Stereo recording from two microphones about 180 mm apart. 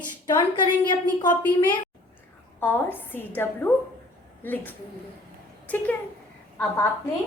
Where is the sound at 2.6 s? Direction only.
10° left (ahead or behind).